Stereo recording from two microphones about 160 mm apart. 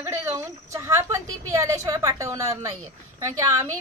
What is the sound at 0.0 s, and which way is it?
A woman's voice, 15° right (ahead or behind).